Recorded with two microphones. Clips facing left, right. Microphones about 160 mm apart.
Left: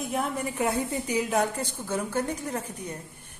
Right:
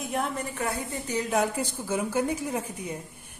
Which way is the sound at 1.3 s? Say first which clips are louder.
Even; 5° right (ahead or behind).